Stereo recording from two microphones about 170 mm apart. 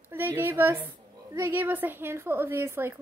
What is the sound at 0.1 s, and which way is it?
Speech, 10° right (ahead or behind).